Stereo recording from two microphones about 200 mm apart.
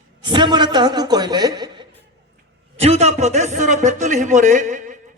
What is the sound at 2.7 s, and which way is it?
A man's voice, 30° right (ahead or behind).